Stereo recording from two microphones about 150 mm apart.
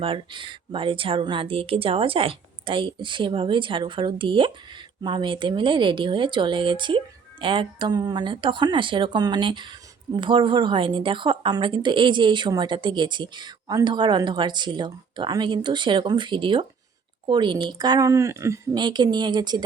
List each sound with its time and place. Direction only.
0.0 s a woman's voice: 35° right (ahead or behind)
18.8 s a woman's voice: 30° right (ahead or behind)